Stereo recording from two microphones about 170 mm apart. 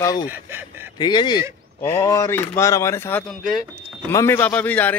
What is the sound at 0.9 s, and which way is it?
A man's voice, 25° left (ahead or behind).